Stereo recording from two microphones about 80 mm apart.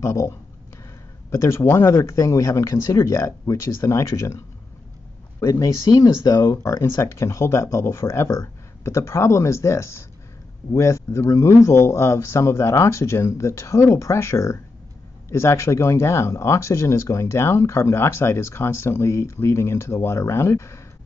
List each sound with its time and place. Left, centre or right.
0.0 s speech: left
1.3 s speech: left
5.4 s speech: left
5.9 s speech: left
6.6 s speech: left